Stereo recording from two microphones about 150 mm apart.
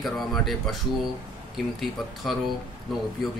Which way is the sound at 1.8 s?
Centre (ahead or behind).